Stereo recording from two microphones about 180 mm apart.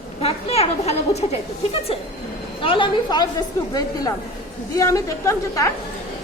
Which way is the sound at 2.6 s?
30° left (ahead or behind).